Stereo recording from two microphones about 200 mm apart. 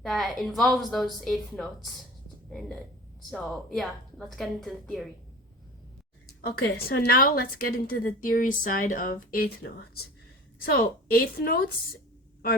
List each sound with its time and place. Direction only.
0.0 s a woman's voice: centre (ahead or behind)
6.4 s a woman's voice: 50° left (ahead or behind)
10.7 s a woman's voice: 45° left (ahead or behind)